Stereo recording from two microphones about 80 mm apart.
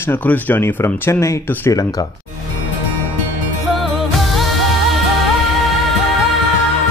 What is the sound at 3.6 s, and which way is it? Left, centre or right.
Music, centre.